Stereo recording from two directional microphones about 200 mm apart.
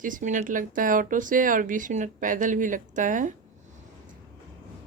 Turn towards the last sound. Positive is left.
turn(degrees=-40)  # may be behind; listen again after turning